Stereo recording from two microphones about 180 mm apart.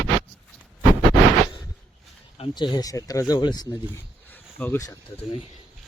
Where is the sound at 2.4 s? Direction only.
25° left (ahead or behind).